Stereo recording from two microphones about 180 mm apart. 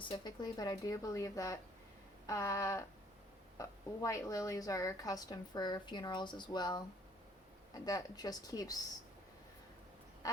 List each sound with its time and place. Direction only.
0.0 s a woman's voice: 25° left (ahead or behind)
2.2 s a sound: 15° left (ahead or behind)
3.6 s a woman's voice: 20° left (ahead or behind)
10.2 s duck: 20° left (ahead or behind)